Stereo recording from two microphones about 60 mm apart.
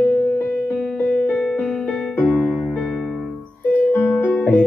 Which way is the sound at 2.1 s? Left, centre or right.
Left.